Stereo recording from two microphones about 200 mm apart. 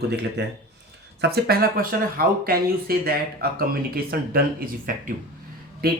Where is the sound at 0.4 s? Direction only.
60° right (ahead or behind).